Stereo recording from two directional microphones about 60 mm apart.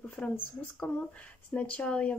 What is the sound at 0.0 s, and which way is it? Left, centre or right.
Speech, left.